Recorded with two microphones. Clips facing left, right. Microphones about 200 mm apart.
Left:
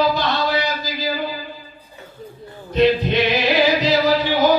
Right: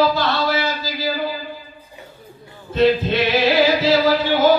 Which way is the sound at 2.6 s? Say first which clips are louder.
Even; 15° left (ahead or behind).